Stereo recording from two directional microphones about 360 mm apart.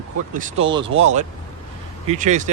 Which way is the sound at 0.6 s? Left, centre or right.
Centre.